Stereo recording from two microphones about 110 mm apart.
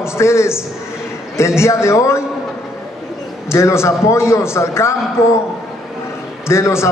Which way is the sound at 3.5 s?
25° left (ahead or behind).